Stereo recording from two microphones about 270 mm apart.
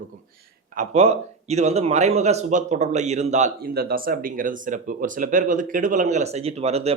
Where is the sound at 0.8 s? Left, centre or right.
Right.